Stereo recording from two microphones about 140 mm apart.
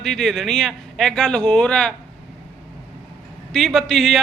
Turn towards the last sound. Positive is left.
turn(degrees=0)  # may be behind; listen again after turning